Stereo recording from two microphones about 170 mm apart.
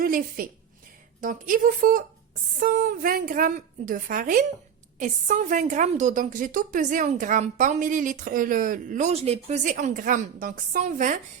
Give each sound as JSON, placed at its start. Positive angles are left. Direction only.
{"t": 0.0, "sound": "a woman's voice", "side_deg": -55}
{"t": 9.7, "sound": "a woman's voice", "side_deg": -50}